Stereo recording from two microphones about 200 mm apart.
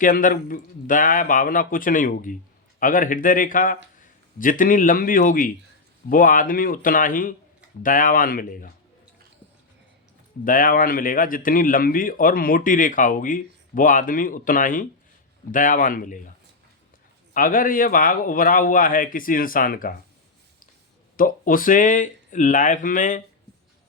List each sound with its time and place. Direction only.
0.0 s a man's voice: 45° left (ahead or behind)
10.4 s speech: 45° left (ahead or behind)
17.3 s speech: 45° left (ahead or behind)
21.2 s speech: 45° left (ahead or behind)